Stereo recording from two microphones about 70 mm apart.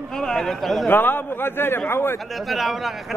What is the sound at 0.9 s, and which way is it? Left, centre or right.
A man's voice, left.